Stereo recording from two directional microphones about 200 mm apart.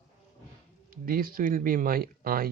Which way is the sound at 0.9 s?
45° right (ahead or behind).